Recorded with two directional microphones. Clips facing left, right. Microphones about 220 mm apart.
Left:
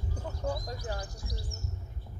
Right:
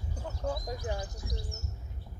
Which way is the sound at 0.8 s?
20° right (ahead or behind).